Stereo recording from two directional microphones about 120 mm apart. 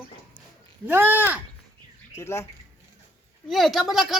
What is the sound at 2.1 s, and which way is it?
Speech, 25° left (ahead or behind).